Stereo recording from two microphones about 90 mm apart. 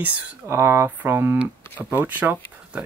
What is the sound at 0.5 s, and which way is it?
Speech, 30° right (ahead or behind).